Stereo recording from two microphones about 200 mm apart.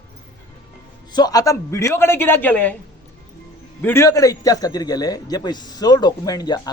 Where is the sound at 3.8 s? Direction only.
15° left (ahead or behind).